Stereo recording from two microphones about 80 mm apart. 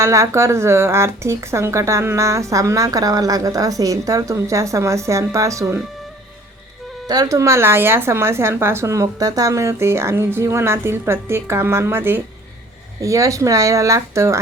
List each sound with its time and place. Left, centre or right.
0.0 s speech: right
7.1 s speech: right
13.0 s speech: right